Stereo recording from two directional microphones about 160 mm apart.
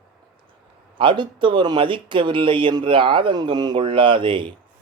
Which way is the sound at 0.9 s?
30° right (ahead or behind).